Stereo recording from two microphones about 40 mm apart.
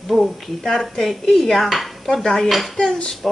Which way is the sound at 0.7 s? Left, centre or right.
Centre.